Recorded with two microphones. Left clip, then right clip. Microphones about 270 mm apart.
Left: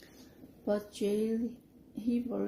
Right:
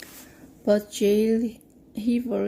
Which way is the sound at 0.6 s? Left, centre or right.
Right.